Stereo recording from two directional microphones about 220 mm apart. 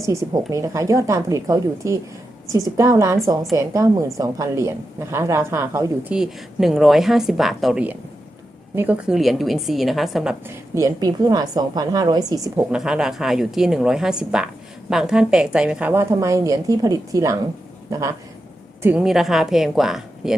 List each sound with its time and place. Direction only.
0.0 s a woman's voice: 15° right (ahead or behind)
10.8 s a woman's voice: 15° right (ahead or behind)
12.7 s a woman's voice: 5° right (ahead or behind)
18.8 s a woman's voice: 5° right (ahead or behind)